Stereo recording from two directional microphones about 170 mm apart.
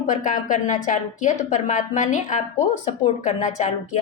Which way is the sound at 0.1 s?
50° left (ahead or behind).